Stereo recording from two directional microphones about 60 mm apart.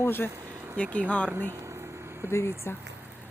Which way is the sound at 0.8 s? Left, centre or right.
Centre.